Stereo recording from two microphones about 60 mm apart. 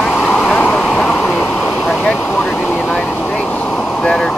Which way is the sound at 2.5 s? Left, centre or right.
Left.